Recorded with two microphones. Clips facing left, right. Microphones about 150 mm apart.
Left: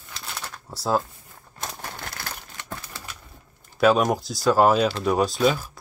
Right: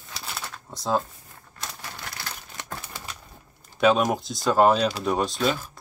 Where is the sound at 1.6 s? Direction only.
50° left (ahead or behind).